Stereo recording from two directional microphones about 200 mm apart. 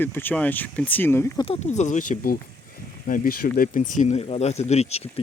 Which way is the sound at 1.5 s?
35° left (ahead or behind).